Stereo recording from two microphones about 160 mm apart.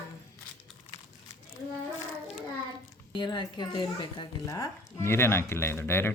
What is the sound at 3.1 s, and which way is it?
Speech, 25° left (ahead or behind).